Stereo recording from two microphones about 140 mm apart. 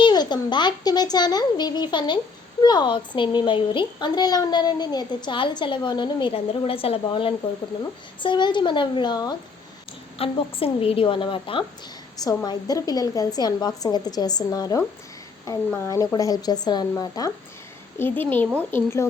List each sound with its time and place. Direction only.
0.0 s a child's voice: 30° left (ahead or behind)
10.2 s a child's voice: 45° left (ahead or behind)
12.2 s a woman's voice: 25° left (ahead or behind)
18.0 s a woman's voice: 15° left (ahead or behind)